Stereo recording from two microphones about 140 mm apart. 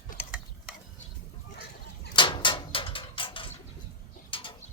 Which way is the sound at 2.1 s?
35° left (ahead or behind).